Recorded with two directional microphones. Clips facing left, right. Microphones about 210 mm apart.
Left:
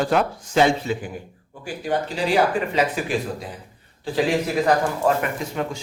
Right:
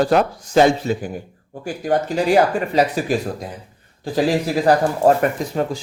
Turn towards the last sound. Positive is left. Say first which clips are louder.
# right 5 dB
turn(degrees=-35)  # may be behind; listen again after turning